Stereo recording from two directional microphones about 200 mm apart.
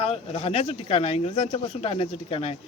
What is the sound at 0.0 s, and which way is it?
Speech, 30° left (ahead or behind).